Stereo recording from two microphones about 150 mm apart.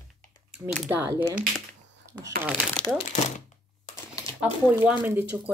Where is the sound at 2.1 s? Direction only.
10° right (ahead or behind).